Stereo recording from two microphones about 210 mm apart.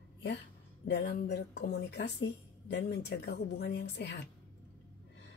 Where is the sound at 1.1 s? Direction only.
45° left (ahead or behind).